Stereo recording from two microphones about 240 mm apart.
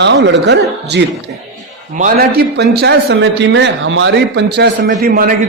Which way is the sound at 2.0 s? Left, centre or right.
Right.